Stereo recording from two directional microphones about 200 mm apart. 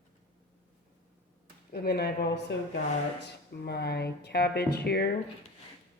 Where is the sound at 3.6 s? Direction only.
55° left (ahead or behind).